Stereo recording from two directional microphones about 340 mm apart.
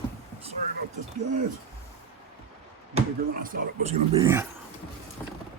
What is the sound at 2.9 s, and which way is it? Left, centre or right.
Speech, right.